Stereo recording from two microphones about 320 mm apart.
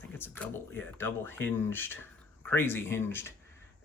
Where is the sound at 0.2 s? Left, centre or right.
Centre.